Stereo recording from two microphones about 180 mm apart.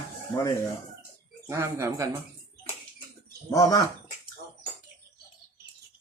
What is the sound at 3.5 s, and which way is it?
Speech, 20° left (ahead or behind).